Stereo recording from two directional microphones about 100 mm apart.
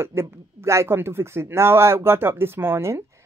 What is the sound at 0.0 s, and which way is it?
Speech, 25° right (ahead or behind).